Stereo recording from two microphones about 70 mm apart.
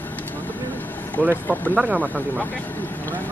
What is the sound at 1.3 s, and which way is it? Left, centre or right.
Speech, left.